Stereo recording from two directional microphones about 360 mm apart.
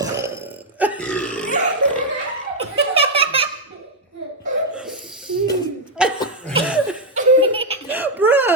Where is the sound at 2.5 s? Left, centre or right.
Centre.